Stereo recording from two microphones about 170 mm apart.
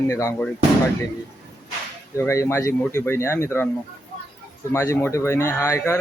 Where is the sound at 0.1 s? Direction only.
15° left (ahead or behind).